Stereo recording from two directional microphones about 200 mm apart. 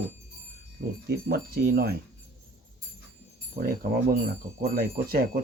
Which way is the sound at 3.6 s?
50° right (ahead or behind).